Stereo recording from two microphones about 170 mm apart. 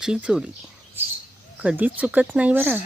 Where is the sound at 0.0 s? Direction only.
5° right (ahead or behind).